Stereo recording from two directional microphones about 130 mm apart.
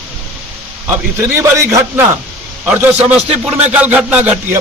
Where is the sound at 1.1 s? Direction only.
20° right (ahead or behind).